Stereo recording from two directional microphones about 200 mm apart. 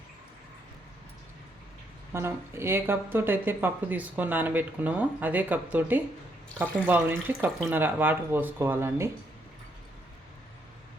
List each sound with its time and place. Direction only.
2.1 s speech: 15° right (ahead or behind)